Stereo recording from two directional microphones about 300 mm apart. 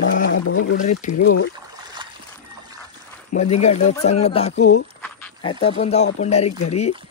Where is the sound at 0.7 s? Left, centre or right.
Left.